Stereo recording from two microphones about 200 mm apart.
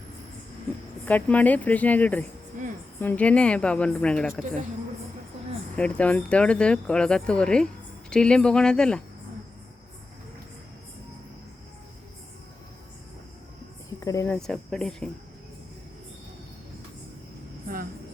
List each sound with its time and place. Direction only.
1.0 s speech: 10° left (ahead or behind)
2.6 s a sound: 40° right (ahead or behind)
3.0 s speech: 10° left (ahead or behind)
5.7 s speech: 5° left (ahead or behind)
14.0 s speech: 15° left (ahead or behind)
14.3 s speech: 5° left (ahead or behind)